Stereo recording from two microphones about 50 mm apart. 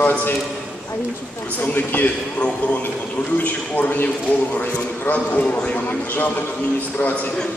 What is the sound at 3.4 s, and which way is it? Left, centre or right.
A man's voice, left.